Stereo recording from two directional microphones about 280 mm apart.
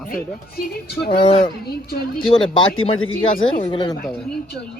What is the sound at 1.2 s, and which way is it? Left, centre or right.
Speech, centre.